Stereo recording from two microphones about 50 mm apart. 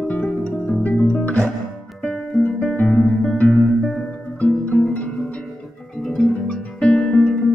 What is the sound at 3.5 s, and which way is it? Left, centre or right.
Music, centre.